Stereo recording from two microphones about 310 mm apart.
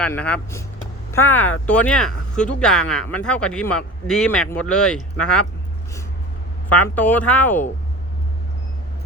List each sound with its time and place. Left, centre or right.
0.0 s speech: centre
6.7 s speech: centre